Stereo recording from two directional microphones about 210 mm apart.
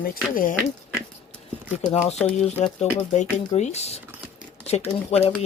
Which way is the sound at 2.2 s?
30° left (ahead or behind).